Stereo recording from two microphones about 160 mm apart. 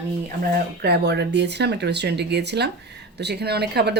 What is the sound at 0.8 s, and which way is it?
Speech, 90° right.